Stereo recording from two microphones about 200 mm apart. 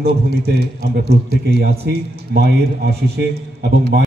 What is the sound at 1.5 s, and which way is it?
A woman's voice, 50° right (ahead or behind).